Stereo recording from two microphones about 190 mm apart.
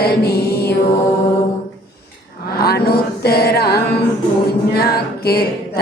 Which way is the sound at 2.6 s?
55° left (ahead or behind).